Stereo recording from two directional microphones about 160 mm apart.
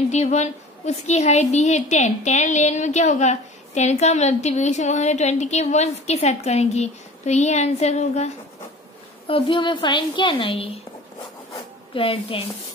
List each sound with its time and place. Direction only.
0.1 s a woman's voice: 45° left (ahead or behind)
9.3 s a woman's voice: 30° left (ahead or behind)
11.9 s a woman's voice: 35° left (ahead or behind)